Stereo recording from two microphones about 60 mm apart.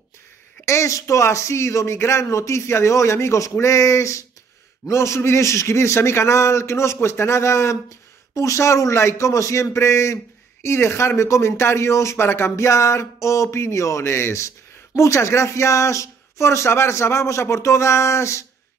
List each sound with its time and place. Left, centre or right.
0.7 s a man's voice: left